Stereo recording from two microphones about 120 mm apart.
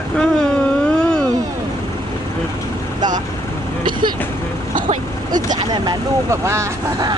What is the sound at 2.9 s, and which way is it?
Speech, 35° right (ahead or behind).